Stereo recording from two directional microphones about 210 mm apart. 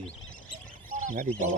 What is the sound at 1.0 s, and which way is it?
Speech, 35° right (ahead or behind).